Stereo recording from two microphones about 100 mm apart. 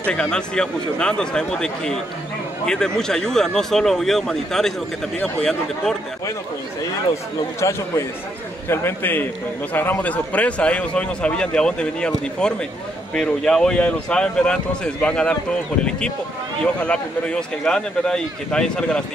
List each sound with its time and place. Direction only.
0.0 s speech: 10° left (ahead or behind)
7.6 s a man's voice: 30° left (ahead or behind); by 15.3 s 10° left (ahead or behind)
16.8 s speech: 10° left (ahead or behind)